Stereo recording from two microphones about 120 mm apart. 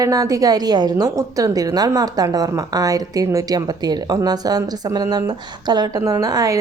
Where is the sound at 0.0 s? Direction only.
30° right (ahead or behind).